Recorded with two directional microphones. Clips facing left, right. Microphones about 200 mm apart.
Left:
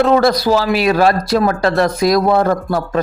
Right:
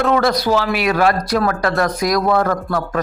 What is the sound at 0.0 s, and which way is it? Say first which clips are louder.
Speech: left 4 dB; 35° left (ahead or behind).